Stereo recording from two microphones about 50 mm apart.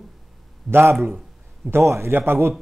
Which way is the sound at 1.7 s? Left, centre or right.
Right.